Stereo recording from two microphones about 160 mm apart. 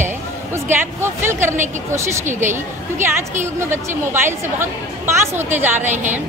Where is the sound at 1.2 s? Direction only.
15° right (ahead or behind).